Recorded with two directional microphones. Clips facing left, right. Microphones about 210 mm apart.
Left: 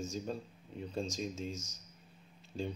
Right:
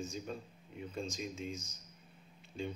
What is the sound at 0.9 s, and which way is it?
Speech, 35° left (ahead or behind).